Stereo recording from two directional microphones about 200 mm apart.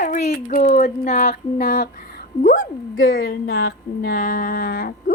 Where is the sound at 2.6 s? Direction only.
85° left.